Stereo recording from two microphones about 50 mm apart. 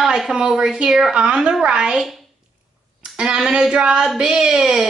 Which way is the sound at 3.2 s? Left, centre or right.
Centre.